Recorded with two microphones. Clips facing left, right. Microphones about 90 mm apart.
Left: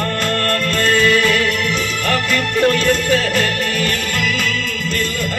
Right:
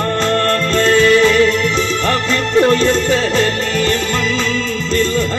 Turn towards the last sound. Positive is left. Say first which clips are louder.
# right 3 dB
turn(degrees=-25)  # may be behind; listen again after turning